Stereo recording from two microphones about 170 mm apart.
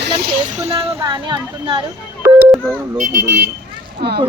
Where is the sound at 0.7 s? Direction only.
30° right (ahead or behind).